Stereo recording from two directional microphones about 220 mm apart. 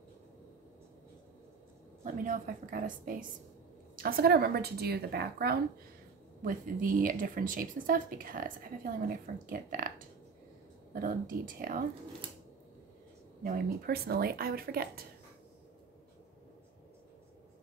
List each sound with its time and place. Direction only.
2.0 s a woman's voice: 35° right (ahead or behind)
13.4 s a woman's voice: 40° right (ahead or behind)